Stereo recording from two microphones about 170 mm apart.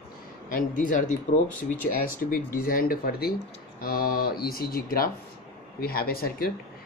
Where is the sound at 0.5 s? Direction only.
50° left (ahead or behind).